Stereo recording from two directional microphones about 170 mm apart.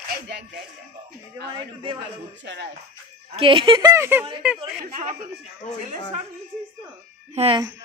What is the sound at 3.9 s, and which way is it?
Speech, 15° right (ahead or behind).